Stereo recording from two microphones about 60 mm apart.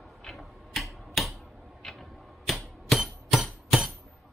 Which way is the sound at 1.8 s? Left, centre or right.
Centre.